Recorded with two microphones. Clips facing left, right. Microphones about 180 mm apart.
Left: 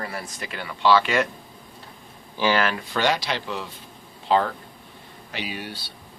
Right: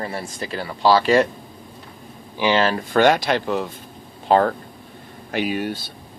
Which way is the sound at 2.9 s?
50° right (ahead or behind).